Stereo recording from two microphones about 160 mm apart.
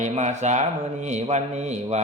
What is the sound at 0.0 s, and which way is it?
Speech, 45° right (ahead or behind).